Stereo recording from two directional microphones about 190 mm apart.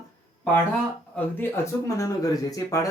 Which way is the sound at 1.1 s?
15° left (ahead or behind).